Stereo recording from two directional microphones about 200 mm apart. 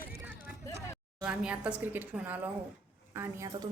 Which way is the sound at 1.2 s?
5° right (ahead or behind).